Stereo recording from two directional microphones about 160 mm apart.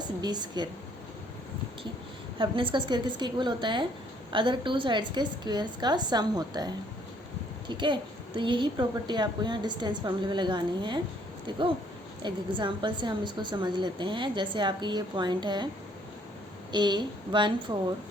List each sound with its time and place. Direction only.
0.2 s a woman's voice: 25° right (ahead or behind)
2.4 s a woman's voice: 30° right (ahead or behind)
7.7 s a woman's voice: 30° right (ahead or behind)
12.2 s a woman's voice: 30° right (ahead or behind)
16.7 s a woman's voice: 25° right (ahead or behind)